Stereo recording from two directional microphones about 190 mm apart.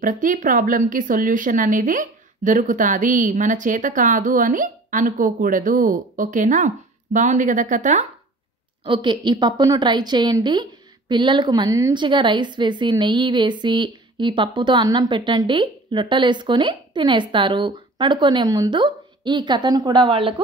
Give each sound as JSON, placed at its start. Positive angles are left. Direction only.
{"t": 0.0, "sound": "a woman's voice", "side_deg": -45}
{"t": 8.8, "sound": "a woman's voice", "side_deg": -25}